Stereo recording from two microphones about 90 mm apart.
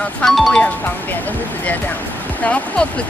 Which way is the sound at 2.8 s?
10° left (ahead or behind).